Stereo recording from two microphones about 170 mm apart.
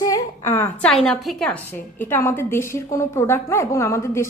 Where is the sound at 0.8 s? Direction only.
5° left (ahead or behind).